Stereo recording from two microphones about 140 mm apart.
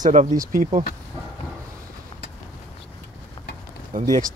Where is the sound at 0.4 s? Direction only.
80° right.